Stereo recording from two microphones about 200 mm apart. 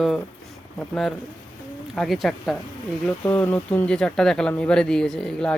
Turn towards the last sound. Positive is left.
turn(degrees=5)  # may be behind; listen again after turning